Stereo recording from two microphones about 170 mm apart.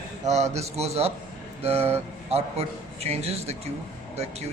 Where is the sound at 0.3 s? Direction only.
40° right (ahead or behind).